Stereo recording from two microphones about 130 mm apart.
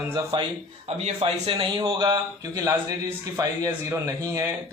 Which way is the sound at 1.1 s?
50° right (ahead or behind).